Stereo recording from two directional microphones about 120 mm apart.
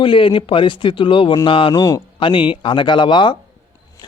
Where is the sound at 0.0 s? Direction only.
45° left (ahead or behind).